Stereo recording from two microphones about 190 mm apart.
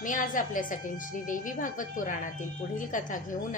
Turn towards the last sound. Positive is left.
turn(degrees=45)  # may be behind; listen again after turning